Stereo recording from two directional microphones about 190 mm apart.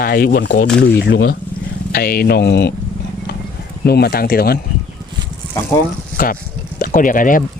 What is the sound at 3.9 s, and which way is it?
Speech, 55° left (ahead or behind).